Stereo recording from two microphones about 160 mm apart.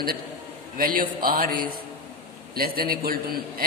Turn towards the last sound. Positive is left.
turn(degrees=-65)  # may be behind; listen again after turning